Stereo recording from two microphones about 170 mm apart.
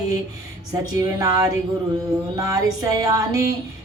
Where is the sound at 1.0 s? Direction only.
20° right (ahead or behind).